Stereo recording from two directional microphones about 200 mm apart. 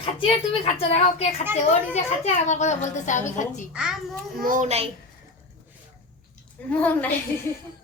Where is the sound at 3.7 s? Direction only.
5° right (ahead or behind).